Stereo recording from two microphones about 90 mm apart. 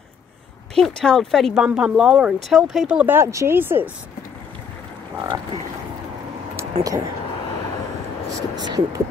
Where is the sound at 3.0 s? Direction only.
20° right (ahead or behind).